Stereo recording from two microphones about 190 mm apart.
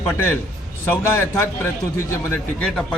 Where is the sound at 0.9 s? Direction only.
15° left (ahead or behind).